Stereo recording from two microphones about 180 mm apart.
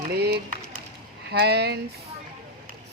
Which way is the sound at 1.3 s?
65° right (ahead or behind).